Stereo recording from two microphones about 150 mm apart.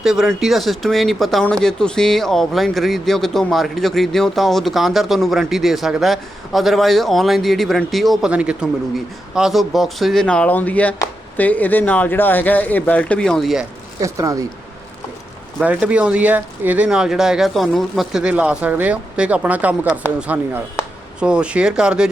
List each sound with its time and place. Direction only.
0.0 s speech: centre (ahead or behind)
14.0 s speech: 20° right (ahead or behind)
15.6 s speech: 10° right (ahead or behind)